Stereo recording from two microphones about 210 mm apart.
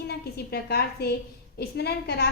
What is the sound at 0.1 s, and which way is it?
A woman's voice, 50° left (ahead or behind).